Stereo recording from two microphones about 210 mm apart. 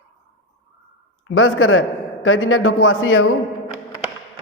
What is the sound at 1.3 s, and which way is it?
A man's voice, 75° left (ahead or behind).